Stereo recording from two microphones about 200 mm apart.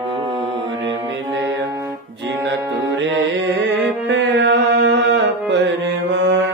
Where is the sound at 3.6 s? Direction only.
65° right (ahead or behind).